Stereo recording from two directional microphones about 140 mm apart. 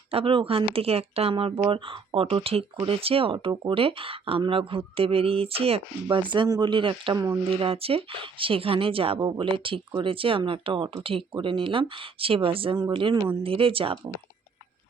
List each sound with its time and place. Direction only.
0.1 s speech: 40° right (ahead or behind)